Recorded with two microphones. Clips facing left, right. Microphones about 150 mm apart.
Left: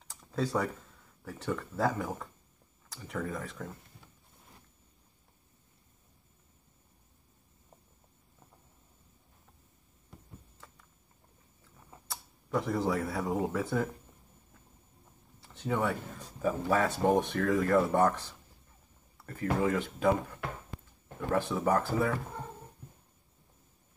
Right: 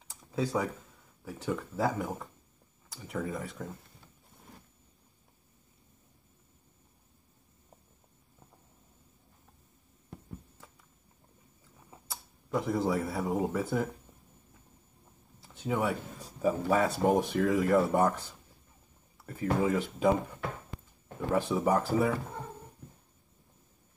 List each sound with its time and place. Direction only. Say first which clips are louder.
0.1 s a sound: even; 5° right (ahead or behind)
1.2 s speech: right 1 dB; 10° right (ahead or behind)
11.9 s tick-tock: even; 5° right (ahead or behind)
13.6 s speech: even; centre (ahead or behind)
15.6 s speech: right 1 dB; 10° right (ahead or behind)
19.2 s speech: right 1 dB; 10° right (ahead or behind)
21.3 s speech: right 1 dB; 10° right (ahead or behind)